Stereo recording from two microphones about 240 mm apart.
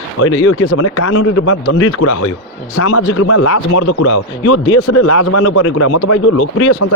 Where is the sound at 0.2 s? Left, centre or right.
Left.